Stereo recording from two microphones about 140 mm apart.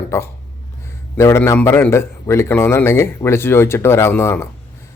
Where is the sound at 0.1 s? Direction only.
20° left (ahead or behind).